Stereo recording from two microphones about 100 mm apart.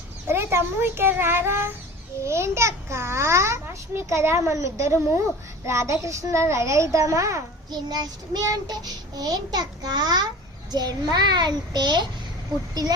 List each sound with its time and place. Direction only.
0.3 s a child's voice: 25° right (ahead or behind); by 12.0 s 45° right (ahead or behind)